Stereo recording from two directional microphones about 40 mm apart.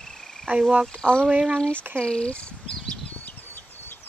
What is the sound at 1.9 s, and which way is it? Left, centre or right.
Speech, left.